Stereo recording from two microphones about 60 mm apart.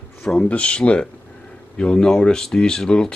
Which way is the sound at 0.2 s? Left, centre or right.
Centre.